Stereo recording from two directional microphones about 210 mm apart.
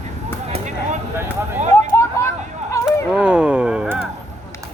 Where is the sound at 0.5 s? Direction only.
35° right (ahead or behind).